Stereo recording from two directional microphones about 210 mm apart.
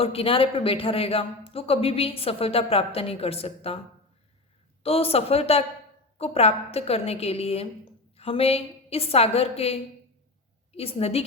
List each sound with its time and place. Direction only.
0.0 s a man's voice: 25° left (ahead or behind)
4.8 s a man's voice: 30° left (ahead or behind)